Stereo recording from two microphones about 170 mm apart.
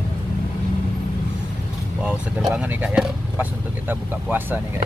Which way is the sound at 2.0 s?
5° right (ahead or behind).